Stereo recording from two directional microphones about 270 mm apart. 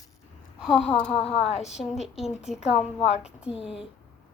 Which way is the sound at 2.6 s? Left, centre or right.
Left.